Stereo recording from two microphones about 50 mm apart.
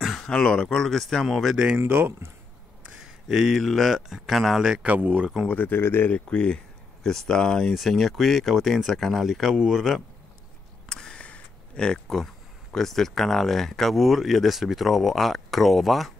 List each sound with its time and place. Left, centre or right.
0.0 s a sound: centre
0.3 s speech: centre
1.8 s speech: right
3.1 s speech: centre
4.8 s speech: right
5.5 s speech: left
5.8 s speech: left
6.0 s speech: left
7.0 s speech: centre
7.7 s speech: centre
10.9 s a sound: centre
12.7 s speech: centre